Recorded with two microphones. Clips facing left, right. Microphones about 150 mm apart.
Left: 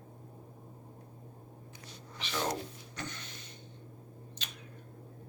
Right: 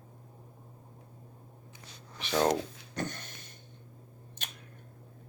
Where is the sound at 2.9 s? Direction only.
50° right (ahead or behind).